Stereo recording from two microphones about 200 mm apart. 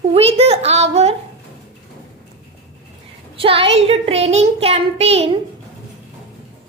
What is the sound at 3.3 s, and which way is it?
A woman's voice, 25° right (ahead or behind).